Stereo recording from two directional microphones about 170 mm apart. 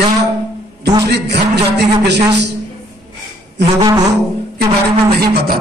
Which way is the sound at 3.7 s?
20° right (ahead or behind).